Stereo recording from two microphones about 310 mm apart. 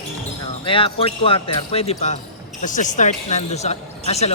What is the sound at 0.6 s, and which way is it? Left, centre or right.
Speech, centre.